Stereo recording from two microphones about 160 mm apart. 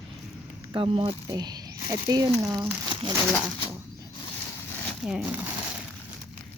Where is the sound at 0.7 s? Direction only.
35° right (ahead or behind).